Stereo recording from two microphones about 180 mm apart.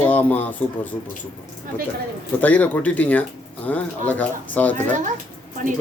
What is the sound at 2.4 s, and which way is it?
Speech, 10° left (ahead or behind).